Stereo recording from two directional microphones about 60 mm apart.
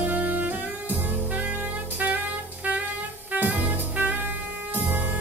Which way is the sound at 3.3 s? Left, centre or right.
Right.